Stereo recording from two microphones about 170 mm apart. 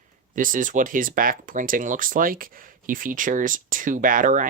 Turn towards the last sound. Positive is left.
turn(degrees=-50)  # may be behind; listen again after turning